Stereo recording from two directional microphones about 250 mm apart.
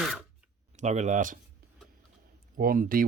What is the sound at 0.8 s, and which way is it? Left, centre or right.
Speech, right.